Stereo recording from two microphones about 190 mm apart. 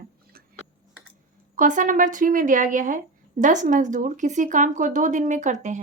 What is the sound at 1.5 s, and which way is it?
Speech, 45° right (ahead or behind).